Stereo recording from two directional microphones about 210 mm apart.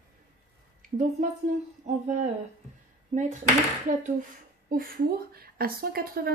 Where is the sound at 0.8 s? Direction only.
35° right (ahead or behind).